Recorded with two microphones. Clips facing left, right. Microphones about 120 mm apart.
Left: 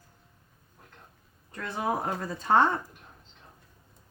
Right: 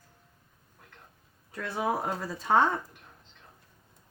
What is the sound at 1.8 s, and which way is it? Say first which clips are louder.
Speech: even; 5° right (ahead or behind).